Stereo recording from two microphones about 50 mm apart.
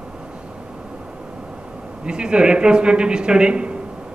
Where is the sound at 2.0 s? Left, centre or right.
Centre.